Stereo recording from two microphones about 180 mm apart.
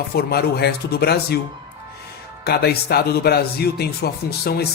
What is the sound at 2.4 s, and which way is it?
Speech, 60° left (ahead or behind).